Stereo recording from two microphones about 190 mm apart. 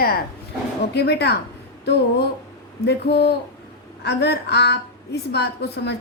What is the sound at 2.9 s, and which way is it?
A woman's voice, 60° left (ahead or behind).